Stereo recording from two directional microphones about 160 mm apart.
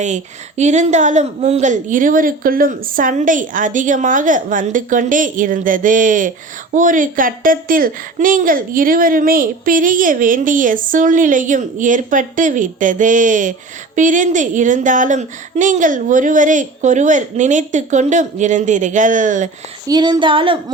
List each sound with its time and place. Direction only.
0.0 s a woman's voice: 45° right (ahead or behind)
19.9 s speech: 25° right (ahead or behind)